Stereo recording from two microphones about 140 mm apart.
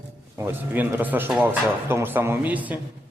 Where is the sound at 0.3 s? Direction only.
15° right (ahead or behind).